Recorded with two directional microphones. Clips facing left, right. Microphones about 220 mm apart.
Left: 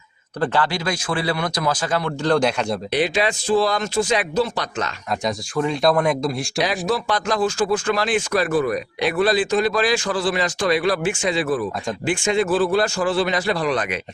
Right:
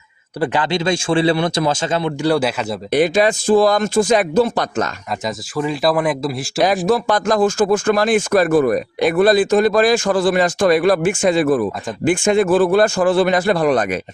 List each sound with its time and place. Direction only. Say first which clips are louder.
0.3 s speech: right 3 dB; 15° right (ahead or behind)
2.2 s speech: even; 5° right (ahead or behind)
2.9 s speech: right 8 dB; 45° right (ahead or behind)
5.2 s speech: right 1 dB; 5° right (ahead or behind)
6.8 s speech: right 6 dB; 45° right (ahead or behind)